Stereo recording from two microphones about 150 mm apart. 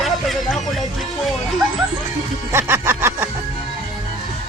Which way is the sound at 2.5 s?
15° right (ahead or behind).